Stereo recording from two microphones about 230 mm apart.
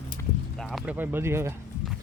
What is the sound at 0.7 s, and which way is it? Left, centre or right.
Speech, centre.